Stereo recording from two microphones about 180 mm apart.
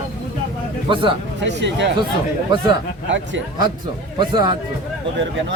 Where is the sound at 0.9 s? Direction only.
30° right (ahead or behind).